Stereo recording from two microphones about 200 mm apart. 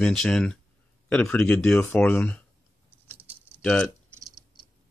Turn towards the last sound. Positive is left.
turn(degrees=5)  # may be behind; listen again after turning